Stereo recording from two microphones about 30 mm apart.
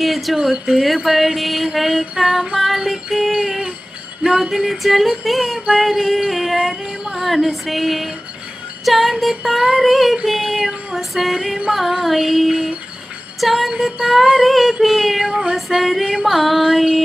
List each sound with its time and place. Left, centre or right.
0.0 s a sound: centre
0.4 s music: centre
6.9 s female singing: right
7.6 s music: centre